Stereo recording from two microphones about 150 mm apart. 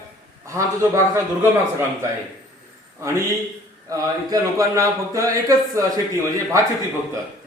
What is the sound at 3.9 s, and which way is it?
Speech, 20° right (ahead or behind).